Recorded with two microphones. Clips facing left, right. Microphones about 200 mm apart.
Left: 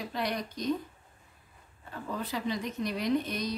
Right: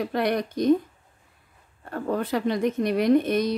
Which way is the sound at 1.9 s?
60° right (ahead or behind).